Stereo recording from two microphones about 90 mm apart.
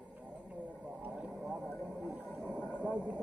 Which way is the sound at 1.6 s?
10° left (ahead or behind).